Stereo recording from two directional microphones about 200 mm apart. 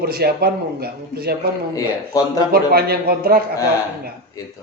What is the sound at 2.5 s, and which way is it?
Speech, 50° right (ahead or behind).